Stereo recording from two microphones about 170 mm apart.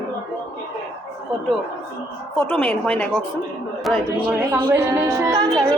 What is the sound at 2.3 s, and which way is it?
A woman's voice, 10° left (ahead or behind).